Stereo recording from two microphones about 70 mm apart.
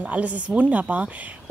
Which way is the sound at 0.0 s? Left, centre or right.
Right.